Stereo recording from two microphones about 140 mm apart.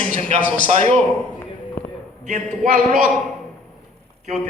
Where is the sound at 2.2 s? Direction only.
60° right (ahead or behind).